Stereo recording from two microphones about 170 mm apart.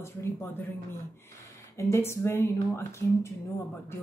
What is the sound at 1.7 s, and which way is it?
A woman's voice, 15° left (ahead or behind).